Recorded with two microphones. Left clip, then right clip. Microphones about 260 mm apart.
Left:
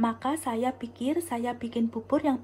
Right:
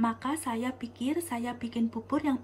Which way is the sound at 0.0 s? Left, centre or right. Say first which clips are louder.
Left 2 dB; centre.